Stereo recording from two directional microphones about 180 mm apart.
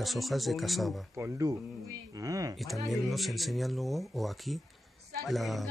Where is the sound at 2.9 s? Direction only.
Centre (ahead or behind).